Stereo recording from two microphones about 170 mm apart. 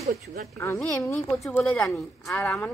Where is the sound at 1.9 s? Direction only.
15° left (ahead or behind).